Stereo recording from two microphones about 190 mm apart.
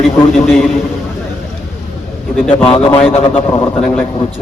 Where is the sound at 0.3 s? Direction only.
5° left (ahead or behind).